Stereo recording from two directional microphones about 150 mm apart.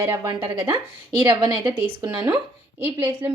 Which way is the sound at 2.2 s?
10° right (ahead or behind).